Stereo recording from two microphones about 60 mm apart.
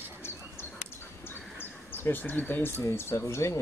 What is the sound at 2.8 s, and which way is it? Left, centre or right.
Speech, left.